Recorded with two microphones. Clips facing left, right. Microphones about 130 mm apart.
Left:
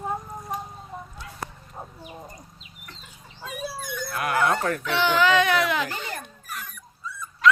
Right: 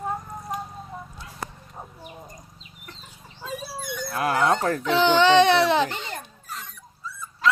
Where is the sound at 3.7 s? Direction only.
20° right (ahead or behind).